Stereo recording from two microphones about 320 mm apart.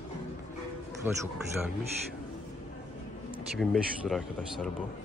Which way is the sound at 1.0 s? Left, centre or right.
Centre.